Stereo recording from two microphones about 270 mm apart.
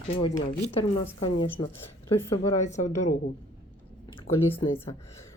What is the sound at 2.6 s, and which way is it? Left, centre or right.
Speech, left.